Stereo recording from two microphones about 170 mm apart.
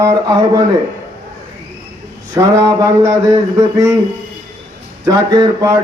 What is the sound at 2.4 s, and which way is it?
Speech, 20° right (ahead or behind).